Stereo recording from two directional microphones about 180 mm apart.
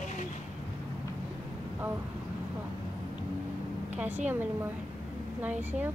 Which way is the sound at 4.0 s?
10° right (ahead or behind).